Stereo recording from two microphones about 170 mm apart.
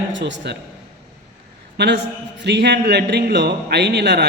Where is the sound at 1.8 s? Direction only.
85° right.